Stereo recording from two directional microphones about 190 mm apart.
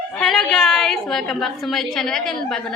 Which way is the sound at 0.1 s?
Centre (ahead or behind).